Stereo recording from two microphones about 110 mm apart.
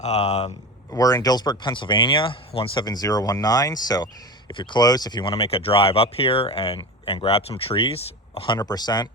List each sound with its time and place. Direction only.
0.0 s speech: 85° left
0.9 s speech: 35° left (ahead or behind); by 2.8 s 55° left (ahead or behind)
2.8 s speech: 35° left (ahead or behind)
5.2 s speech: 60° left (ahead or behind)
8.5 s speech: 40° left (ahead or behind)